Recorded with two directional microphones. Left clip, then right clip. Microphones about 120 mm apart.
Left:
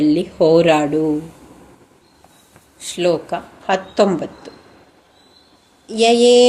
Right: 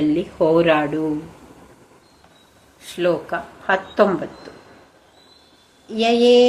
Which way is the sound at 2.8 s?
40° left (ahead or behind).